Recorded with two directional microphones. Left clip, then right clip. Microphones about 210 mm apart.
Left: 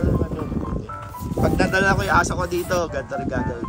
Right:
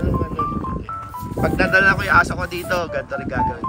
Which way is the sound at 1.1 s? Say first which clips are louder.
Even; centre (ahead or behind).